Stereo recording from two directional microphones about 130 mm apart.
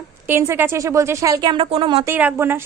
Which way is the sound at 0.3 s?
20° right (ahead or behind).